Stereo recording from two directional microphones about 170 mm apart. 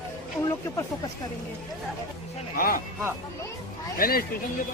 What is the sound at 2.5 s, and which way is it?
Speech, 55° left (ahead or behind).